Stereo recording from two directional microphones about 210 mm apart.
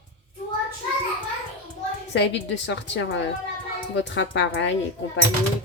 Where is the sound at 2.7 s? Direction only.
55° left (ahead or behind).